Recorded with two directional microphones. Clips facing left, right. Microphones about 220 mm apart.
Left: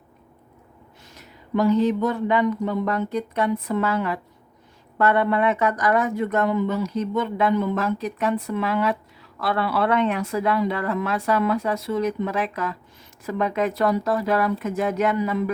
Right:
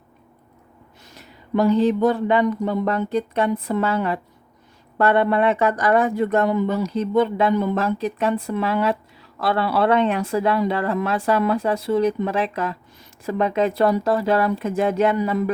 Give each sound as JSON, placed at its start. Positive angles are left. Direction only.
{"t": 1.2, "sound": "speech", "side_deg": -30}